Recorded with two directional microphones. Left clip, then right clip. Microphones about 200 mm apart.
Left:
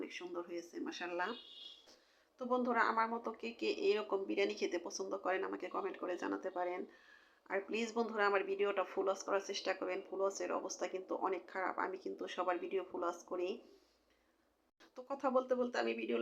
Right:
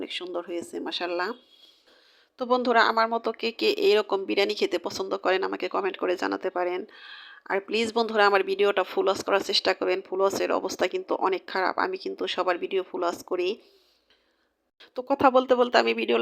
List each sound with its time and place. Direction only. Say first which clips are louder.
0.9 s speech: right 12 dB; 45° right (ahead or behind)
2.5 s speech: right 13 dB; 45° right (ahead or behind)
15.0 s speech: right 15 dB; 50° right (ahead or behind)